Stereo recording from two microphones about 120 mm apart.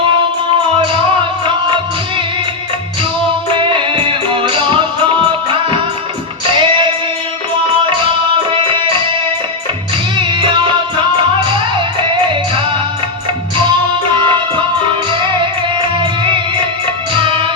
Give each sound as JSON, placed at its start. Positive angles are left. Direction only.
{"t": 1.5, "sound": "music", "side_deg": -45}
{"t": 3.5, "sound": "music", "side_deg": -45}
{"t": 6.5, "sound": "music", "side_deg": -45}
{"t": 8.0, "sound": "music", "side_deg": -45}
{"t": 11.3, "sound": "music", "side_deg": -45}
{"t": 14.2, "sound": "music", "side_deg": -45}